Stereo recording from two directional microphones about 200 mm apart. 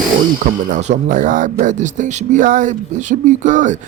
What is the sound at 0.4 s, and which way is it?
Speech, 40° right (ahead or behind).